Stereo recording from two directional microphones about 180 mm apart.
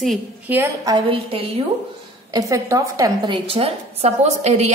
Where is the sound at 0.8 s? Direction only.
25° right (ahead or behind).